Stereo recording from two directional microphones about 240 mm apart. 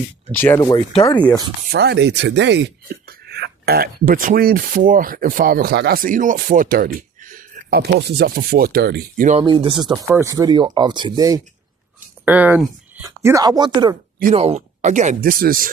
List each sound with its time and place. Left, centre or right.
0.3 s speech: centre
1.7 s speech: right
9.4 s speech: centre
14.2 s speech: right